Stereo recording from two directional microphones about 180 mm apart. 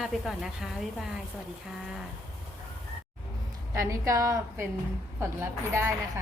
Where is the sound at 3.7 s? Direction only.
15° right (ahead or behind).